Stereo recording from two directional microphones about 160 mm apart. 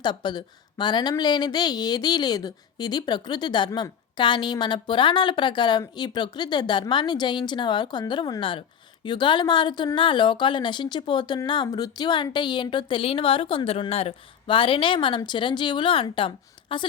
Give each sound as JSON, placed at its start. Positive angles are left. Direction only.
{"t": 0.0, "sound": "speech", "side_deg": 30}